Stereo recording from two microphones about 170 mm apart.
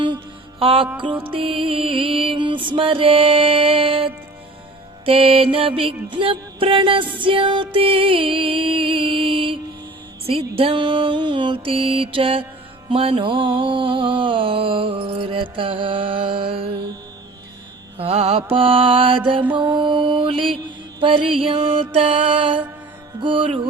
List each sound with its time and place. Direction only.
0.6 s music: 35° right (ahead or behind)
17.9 s music: 35° right (ahead or behind)